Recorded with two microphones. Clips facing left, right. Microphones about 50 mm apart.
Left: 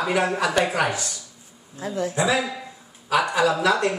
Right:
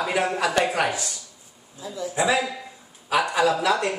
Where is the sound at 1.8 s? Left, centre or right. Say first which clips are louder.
Left 5 dB; left.